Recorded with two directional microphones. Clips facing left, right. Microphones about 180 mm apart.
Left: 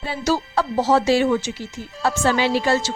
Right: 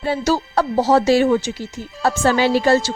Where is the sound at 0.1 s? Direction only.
40° right (ahead or behind).